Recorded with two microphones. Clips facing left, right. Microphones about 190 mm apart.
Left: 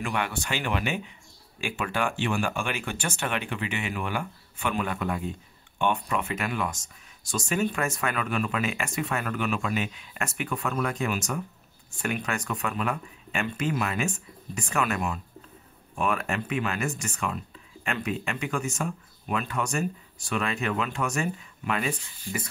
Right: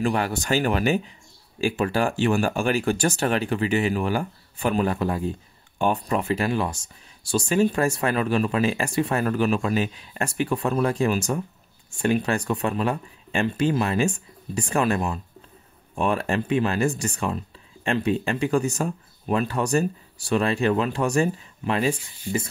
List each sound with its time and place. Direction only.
0.0 s speech: 35° right (ahead or behind)